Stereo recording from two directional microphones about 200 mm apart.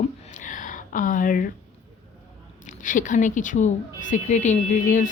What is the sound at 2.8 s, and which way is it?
Speech, 40° left (ahead or behind).